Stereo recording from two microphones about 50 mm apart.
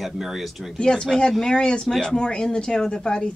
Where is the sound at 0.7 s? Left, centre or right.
Centre.